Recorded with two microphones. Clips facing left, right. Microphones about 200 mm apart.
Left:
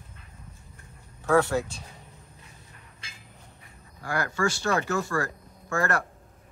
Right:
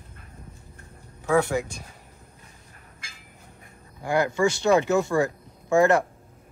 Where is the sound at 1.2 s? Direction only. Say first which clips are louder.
Even; 10° right (ahead or behind).